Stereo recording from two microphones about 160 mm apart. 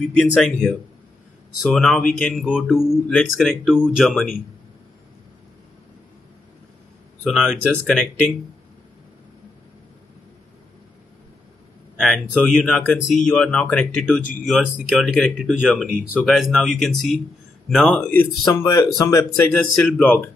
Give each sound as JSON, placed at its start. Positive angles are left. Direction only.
{"t": 0.2, "sound": "speech", "side_deg": 0}
{"t": 7.2, "sound": "speech", "side_deg": 0}
{"t": 12.0, "sound": "speech", "side_deg": 0}
{"t": 19.5, "sound": "speech", "side_deg": 10}